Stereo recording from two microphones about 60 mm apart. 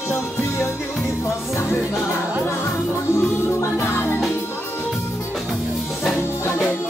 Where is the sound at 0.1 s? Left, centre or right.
Left.